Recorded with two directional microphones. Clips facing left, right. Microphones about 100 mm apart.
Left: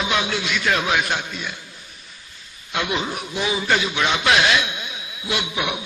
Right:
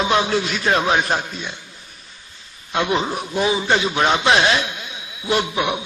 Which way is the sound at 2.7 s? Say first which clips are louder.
Right 4 dB; 35° right (ahead or behind).